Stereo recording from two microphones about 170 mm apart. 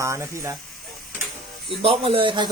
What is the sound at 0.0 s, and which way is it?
Speech, 15° right (ahead or behind).